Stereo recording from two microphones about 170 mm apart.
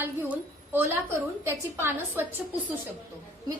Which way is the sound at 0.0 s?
10° right (ahead or behind).